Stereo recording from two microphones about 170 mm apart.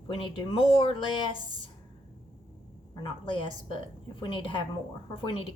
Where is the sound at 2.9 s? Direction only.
30° left (ahead or behind).